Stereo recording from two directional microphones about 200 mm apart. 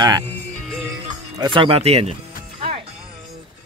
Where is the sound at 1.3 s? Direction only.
20° right (ahead or behind).